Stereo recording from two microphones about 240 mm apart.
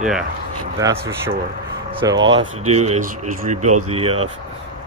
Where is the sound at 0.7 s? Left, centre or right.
Centre.